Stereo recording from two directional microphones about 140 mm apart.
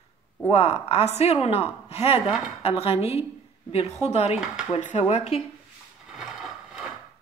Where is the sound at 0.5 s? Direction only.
45° left (ahead or behind).